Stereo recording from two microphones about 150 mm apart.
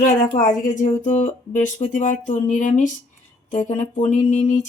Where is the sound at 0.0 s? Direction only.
60° left (ahead or behind).